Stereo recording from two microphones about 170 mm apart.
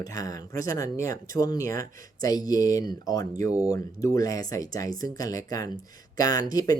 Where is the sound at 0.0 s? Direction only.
20° left (ahead or behind).